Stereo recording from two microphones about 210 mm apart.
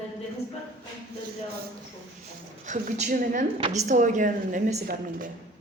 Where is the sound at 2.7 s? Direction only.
35° right (ahead or behind).